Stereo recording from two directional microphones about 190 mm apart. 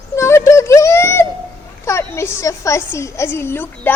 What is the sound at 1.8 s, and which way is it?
A woman's voice, 15° left (ahead or behind).